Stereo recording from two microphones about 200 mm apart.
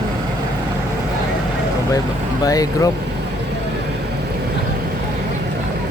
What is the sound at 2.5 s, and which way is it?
Speech, 15° left (ahead or behind).